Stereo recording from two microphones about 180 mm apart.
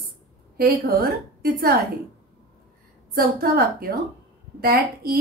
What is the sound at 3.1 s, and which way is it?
A woman's voice, 55° right (ahead or behind).